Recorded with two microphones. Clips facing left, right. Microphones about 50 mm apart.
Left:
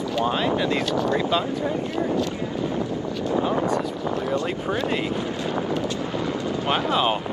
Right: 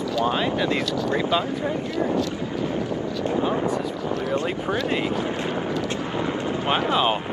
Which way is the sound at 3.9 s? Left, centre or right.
Left.